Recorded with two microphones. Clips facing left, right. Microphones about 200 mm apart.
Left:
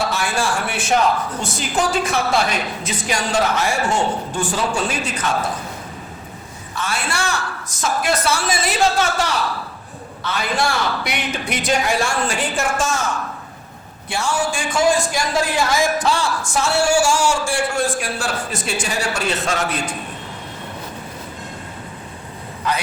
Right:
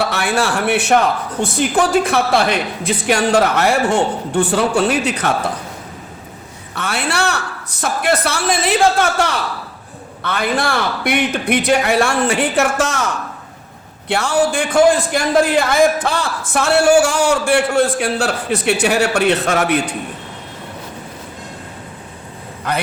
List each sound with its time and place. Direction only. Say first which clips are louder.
0.1 s a man's voice: right 3 dB; 65° right (ahead or behind)
6.7 s a woman's voice: right 4 dB; 65° right (ahead or behind)
14.1 s a man's voice: right 6 dB; 60° right (ahead or behind)
22.6 s a man's voice: right 2 dB; 55° right (ahead or behind)